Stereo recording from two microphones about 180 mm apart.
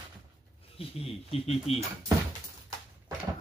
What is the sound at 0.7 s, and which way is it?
Speech, 35° left (ahead or behind).